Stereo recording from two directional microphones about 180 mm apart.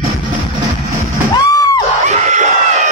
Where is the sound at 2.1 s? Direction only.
40° right (ahead or behind).